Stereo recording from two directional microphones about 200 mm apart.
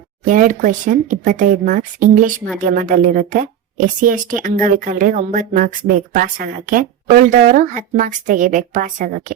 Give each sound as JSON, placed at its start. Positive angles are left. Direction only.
{"t": 0.3, "sound": "a woman's voice", "side_deg": -40}